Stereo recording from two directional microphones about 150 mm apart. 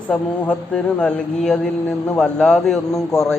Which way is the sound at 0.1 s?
5° left (ahead or behind).